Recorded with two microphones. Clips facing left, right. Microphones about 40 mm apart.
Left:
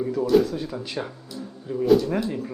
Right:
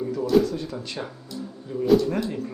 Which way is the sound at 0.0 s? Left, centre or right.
Centre.